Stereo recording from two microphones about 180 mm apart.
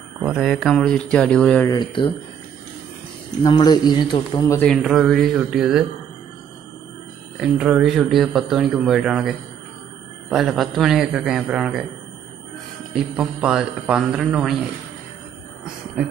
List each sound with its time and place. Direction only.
0.2 s speech: 5° right (ahead or behind)
1.7 s a man's voice: 25° left (ahead or behind)
3.4 s a man's voice: 25° left (ahead or behind)
4.6 s speech: 5° left (ahead or behind)
7.3 s speech: 5° right (ahead or behind)
10.3 s speech: centre (ahead or behind)
12.9 s speech: 5° right (ahead or behind)